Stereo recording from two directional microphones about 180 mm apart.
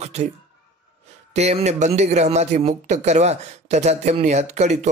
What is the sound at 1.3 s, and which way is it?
Speech, 35° right (ahead or behind).